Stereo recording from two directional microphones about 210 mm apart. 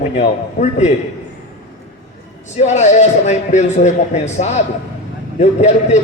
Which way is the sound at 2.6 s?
35° left (ahead or behind).